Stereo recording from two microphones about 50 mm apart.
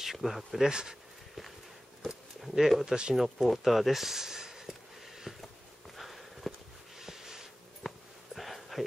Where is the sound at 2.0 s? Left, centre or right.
Centre.